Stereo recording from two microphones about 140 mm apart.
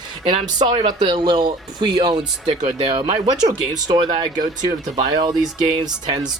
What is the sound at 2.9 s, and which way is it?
Speech, 45° right (ahead or behind).